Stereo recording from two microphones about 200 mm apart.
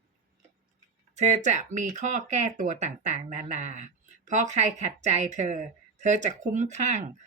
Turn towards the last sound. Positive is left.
turn(degrees=-35)  # may be behind; listen again after turning